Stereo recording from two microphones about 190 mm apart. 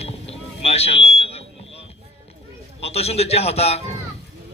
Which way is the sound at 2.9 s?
35° left (ahead or behind).